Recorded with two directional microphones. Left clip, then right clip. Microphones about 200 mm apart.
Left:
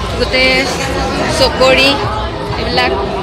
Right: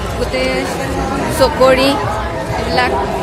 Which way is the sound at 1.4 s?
25° right (ahead or behind).